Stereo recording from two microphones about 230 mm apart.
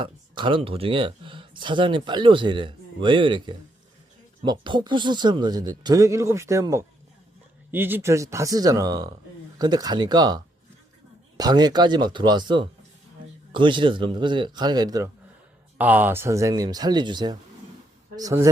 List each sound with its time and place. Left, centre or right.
0.3 s speech: right